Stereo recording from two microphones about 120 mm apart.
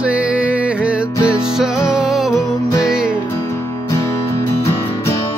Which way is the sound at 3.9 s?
25° left (ahead or behind).